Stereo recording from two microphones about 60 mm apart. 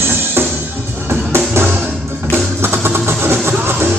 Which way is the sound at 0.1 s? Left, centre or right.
Right.